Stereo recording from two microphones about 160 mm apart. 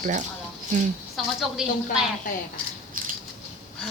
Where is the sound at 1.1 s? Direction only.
Centre (ahead or behind).